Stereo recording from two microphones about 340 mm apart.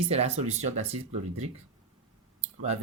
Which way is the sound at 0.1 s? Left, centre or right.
Centre.